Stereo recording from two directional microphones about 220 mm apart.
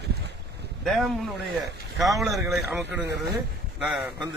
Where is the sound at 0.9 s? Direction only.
Centre (ahead or behind).